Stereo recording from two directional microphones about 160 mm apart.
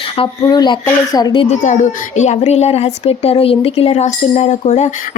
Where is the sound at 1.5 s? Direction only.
45° left (ahead or behind).